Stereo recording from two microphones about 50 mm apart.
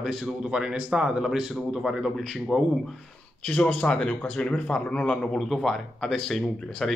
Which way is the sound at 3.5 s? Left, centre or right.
Left.